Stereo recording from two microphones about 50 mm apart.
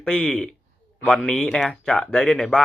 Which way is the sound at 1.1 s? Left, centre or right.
Centre.